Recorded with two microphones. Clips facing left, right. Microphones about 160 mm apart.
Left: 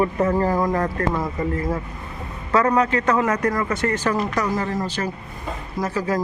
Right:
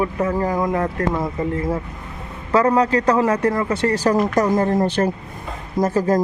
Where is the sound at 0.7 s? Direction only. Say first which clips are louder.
Right 1 dB; 20° right (ahead or behind); by 5.1 s 60° right (ahead or behind).